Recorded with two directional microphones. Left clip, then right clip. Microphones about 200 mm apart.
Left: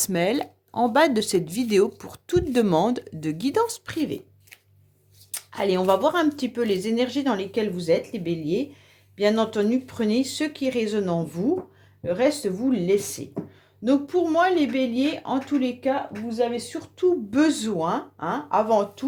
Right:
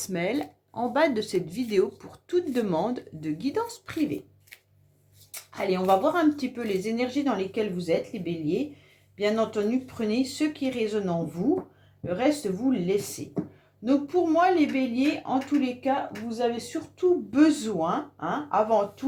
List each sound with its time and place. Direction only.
0.0 s speech: 45° left (ahead or behind)
5.3 s speech: 50° left (ahead or behind)
17.0 s speech: 45° left (ahead or behind)